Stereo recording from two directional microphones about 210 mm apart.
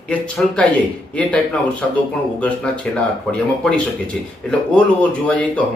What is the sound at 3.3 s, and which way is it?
Speech, 5° left (ahead or behind).